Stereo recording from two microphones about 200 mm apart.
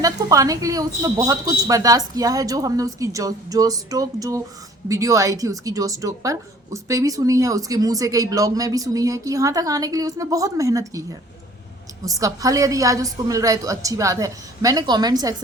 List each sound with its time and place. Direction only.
0.0 s speech: 15° right (ahead or behind)
12.0 s speech: 15° right (ahead or behind)